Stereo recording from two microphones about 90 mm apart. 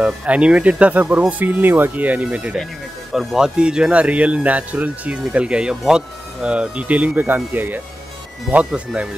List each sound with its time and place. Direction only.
0.0 s speech: 15° right (ahead or behind)